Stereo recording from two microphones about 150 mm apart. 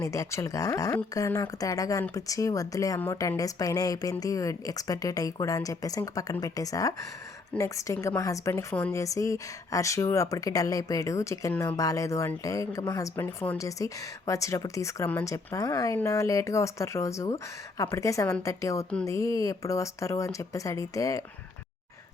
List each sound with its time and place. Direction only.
0.0 s speech: 20° left (ahead or behind)